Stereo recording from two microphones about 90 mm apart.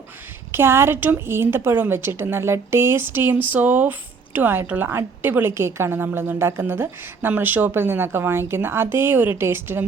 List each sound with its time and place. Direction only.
0.5 s a woman's voice: 25° right (ahead or behind)